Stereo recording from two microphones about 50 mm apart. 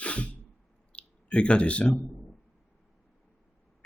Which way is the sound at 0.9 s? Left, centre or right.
Left.